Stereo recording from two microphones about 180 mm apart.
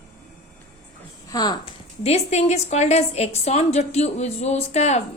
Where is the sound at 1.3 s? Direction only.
20° left (ahead or behind).